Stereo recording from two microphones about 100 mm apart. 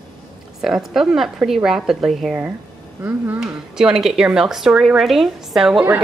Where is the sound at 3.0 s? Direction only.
20° right (ahead or behind).